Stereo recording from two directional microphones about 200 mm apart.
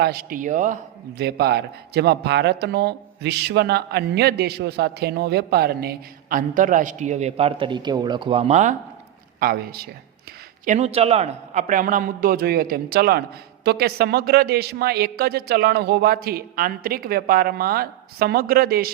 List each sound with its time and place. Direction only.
0.0 s a man's voice: 50° right (ahead or behind)
1.2 s speech: 55° right (ahead or behind); by 8.7 s 35° right (ahead or behind)
9.4 s speech: 50° right (ahead or behind)
10.7 s a man's voice: 35° right (ahead or behind); by 18.9 s 50° right (ahead or behind)